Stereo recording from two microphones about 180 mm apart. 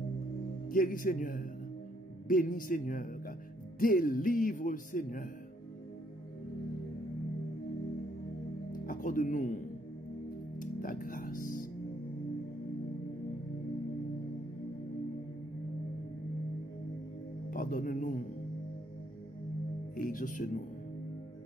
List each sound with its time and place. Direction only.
0.7 s speech: 50° left (ahead or behind)
8.8 s speech: 50° left (ahead or behind)
10.6 s music: 50° left (ahead or behind)
17.5 s speech: 50° left (ahead or behind)
20.1 s speech: 50° left (ahead or behind)